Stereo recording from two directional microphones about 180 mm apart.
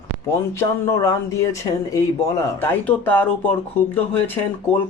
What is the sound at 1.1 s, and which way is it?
Speech, 20° left (ahead or behind).